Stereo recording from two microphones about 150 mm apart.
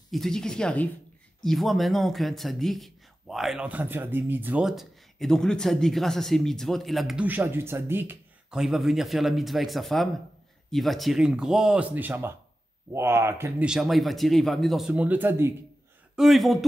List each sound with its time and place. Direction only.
0.1 s a man's voice: 5° left (ahead or behind)
7.2 s speech: 15° right (ahead or behind)
8.5 s a man's voice: centre (ahead or behind); by 13.7 s 15° right (ahead or behind)
13.7 s a man's voice: centre (ahead or behind)
16.2 s a man's voice: centre (ahead or behind)